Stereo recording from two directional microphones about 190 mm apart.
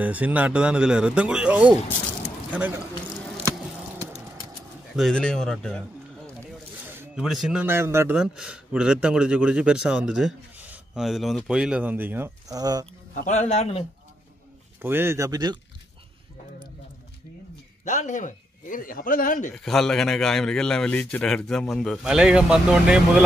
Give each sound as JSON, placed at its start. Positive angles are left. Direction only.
{"t": 0.0, "sound": "speech", "side_deg": -10}
{"t": 4.9, "sound": "speech", "side_deg": 5}
{"t": 7.0, "sound": "speech", "side_deg": 0}
{"t": 13.1, "sound": "a man's voice", "side_deg": 40}
{"t": 14.8, "sound": "speech", "side_deg": -10}
{"t": 17.8, "sound": "a man's voice", "side_deg": 40}
{"t": 19.5, "sound": "speech", "side_deg": 0}